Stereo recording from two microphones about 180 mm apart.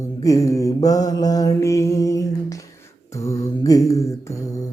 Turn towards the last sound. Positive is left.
turn(degrees=15)  # may be behind; listen again after turning